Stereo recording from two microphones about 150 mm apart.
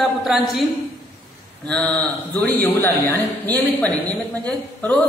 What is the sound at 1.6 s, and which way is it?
A man's voice, 5° left (ahead or behind).